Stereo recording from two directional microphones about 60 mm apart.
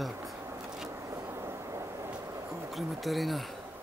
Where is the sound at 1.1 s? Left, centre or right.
Right.